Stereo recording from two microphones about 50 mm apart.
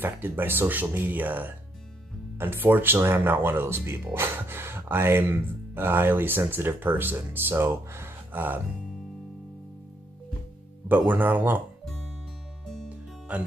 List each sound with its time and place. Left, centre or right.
0.0 s speech: right
2.3 s speech: right
8.3 s speech: right
10.9 s speech: right
13.3 s speech: right